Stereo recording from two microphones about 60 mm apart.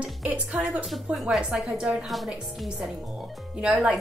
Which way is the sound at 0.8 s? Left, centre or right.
Centre.